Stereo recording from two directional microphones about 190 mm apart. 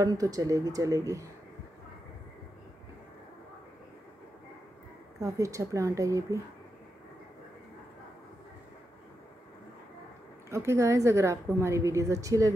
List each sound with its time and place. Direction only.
0.0 s a woman's voice: 20° right (ahead or behind)
5.2 s a woman's voice: 15° right (ahead or behind)
10.5 s a woman's voice: 15° right (ahead or behind)